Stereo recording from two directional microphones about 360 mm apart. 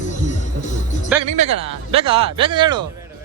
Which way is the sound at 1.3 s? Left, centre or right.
Centre.